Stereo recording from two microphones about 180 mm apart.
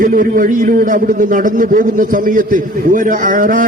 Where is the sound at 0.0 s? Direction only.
50° right (ahead or behind).